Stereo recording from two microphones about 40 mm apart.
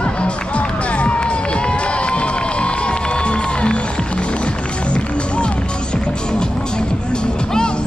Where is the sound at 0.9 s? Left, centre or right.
Left.